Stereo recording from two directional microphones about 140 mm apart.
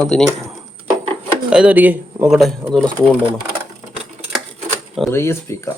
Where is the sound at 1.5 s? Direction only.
10° right (ahead or behind).